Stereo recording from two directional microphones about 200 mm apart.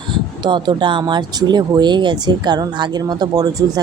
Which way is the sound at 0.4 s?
20° right (ahead or behind).